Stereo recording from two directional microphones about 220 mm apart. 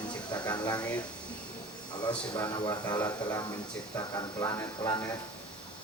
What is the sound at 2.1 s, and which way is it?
Speech, 15° left (ahead or behind).